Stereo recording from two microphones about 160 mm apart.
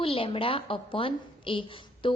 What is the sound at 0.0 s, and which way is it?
A woman's voice, 35° left (ahead or behind).